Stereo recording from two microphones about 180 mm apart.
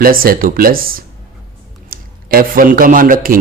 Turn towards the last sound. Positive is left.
turn(degrees=-50)  # may be behind; listen again after turning